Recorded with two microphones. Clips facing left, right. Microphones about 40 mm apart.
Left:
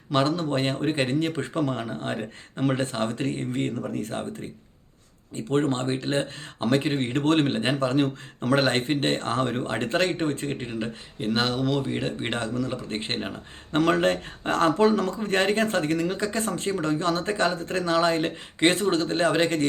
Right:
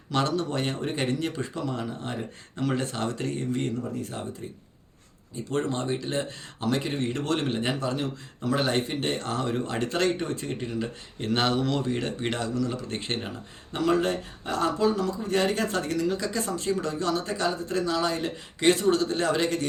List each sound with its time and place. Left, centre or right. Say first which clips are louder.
0.1 s speech: left 3 dB; left
2.6 s speech: left 3 dB; left
3.8 s speech: left 3 dB; left
5.5 s speech: left 4 dB; left
11.2 s speech: even; centre; by 13.3 s left
13.7 s speech: left 3 dB; left